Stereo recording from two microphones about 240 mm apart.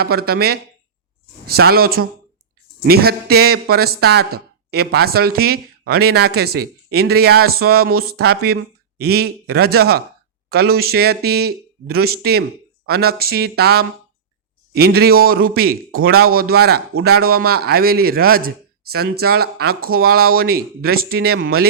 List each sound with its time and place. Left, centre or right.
0.0 s speech: right
16.0 s speech: right
16.2 s speech: right